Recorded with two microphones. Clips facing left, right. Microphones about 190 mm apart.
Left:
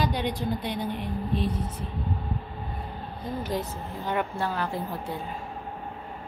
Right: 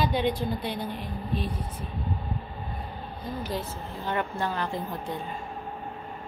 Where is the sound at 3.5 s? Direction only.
15° left (ahead or behind).